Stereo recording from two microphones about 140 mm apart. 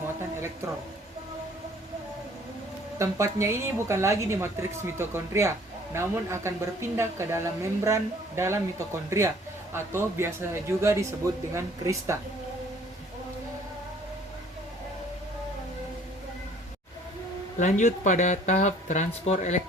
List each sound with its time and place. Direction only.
0.0 s a sound: 20° right (ahead or behind)
3.0 s a woman's voice: 20° right (ahead or behind)
17.6 s speech: 60° left (ahead or behind)